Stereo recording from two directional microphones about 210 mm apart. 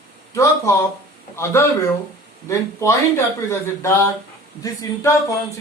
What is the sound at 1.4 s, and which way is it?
A man's voice, 15° left (ahead or behind).